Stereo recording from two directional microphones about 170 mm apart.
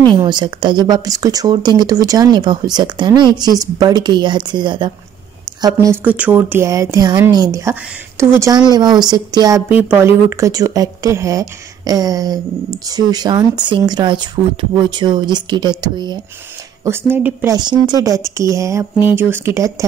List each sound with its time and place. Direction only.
0.1 s a woman's voice: 25° right (ahead or behind)
6.0 s speech: 10° right (ahead or behind)
9.7 s speech: 10° right (ahead or behind)
16.8 s speech: 15° right (ahead or behind)
17.6 s speech: 25° right (ahead or behind)